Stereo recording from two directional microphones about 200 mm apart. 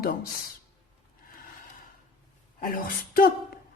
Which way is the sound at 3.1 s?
45° left (ahead or behind).